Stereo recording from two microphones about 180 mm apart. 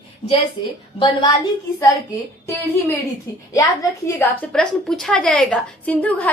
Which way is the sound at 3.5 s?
15° left (ahead or behind).